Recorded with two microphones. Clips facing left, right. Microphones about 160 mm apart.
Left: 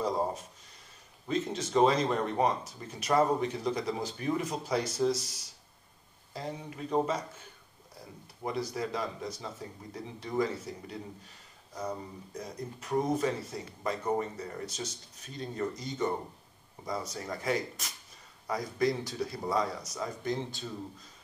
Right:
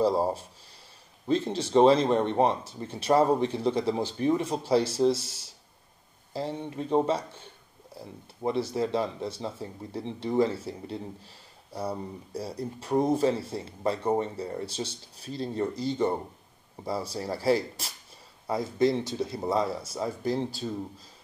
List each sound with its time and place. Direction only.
0.0 s a man's voice: 30° right (ahead or behind)